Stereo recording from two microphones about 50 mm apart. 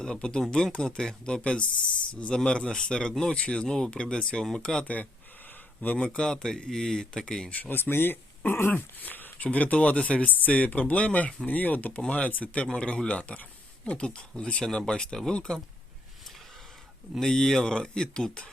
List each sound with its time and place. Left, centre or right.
0.0 s speech: centre
3.3 s speech: left
6.0 s speech: centre
7.5 s speech: left
7.8 s speech: left
8.7 s speech: left; by 15.4 s centre
17.2 s speech: centre